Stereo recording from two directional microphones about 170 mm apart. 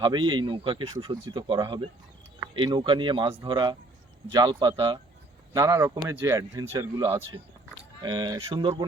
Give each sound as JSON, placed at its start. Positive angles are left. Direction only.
{"t": 0.0, "sound": "speech", "side_deg": -25}